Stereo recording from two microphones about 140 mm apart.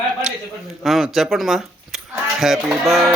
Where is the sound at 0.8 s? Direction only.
Centre (ahead or behind).